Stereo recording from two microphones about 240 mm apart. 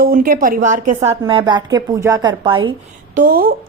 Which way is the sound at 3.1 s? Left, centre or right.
Right.